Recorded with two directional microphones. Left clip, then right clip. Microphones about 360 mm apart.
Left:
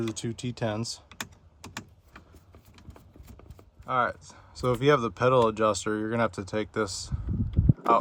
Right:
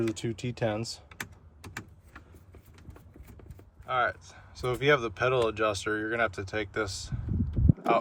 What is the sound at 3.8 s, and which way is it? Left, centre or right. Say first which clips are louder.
Speech: left 1 dB; centre.